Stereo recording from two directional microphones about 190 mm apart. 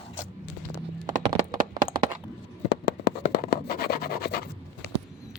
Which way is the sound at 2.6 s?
60° left (ahead or behind).